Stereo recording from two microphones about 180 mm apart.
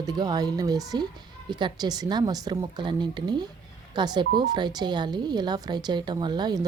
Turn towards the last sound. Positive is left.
turn(degrees=-25)  # may be behind; listen again after turning